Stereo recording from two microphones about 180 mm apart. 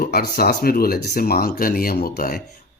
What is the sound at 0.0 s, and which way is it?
Speech, 55° left (ahead or behind).